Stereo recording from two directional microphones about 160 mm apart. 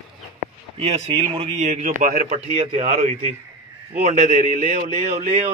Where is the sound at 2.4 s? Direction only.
40° right (ahead or behind).